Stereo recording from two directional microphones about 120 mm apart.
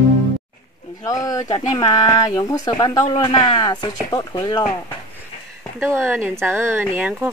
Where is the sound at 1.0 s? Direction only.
30° left (ahead or behind).